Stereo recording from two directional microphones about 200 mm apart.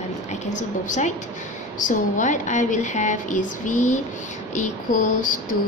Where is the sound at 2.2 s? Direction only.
35° left (ahead or behind).